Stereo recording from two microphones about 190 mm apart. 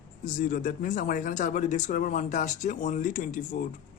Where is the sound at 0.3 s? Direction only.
45° left (ahead or behind).